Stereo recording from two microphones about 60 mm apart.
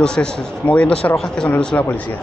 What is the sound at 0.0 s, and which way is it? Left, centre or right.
Speech, centre.